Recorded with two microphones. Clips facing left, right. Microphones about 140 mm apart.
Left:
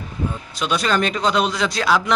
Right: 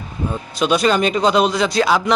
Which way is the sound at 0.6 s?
5° right (ahead or behind).